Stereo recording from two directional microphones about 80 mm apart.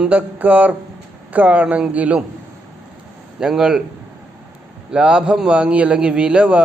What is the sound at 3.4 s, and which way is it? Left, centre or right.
Speech, centre.